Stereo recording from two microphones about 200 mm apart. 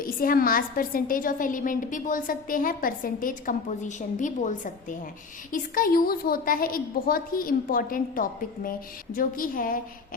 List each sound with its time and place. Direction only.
0.0 s a woman's voice: 45° left (ahead or behind)